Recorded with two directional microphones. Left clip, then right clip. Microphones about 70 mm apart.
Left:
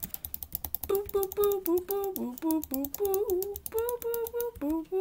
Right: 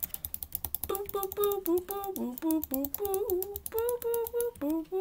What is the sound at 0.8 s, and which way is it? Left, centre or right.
Typing, centre.